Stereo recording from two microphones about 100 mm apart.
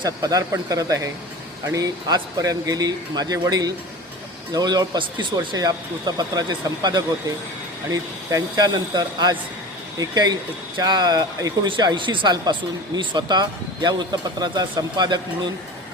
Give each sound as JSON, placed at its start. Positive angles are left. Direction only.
{"t": 0.0, "sound": "a man's voice", "side_deg": -40}
{"t": 5.5, "sound": "a man's voice", "side_deg": -40}
{"t": 8.3, "sound": "speech", "side_deg": -40}